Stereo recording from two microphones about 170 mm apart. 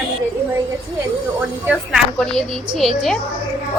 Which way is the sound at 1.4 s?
10° right (ahead or behind).